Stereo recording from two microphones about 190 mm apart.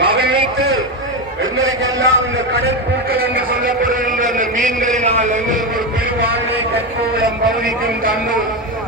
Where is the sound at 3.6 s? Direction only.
45° right (ahead or behind).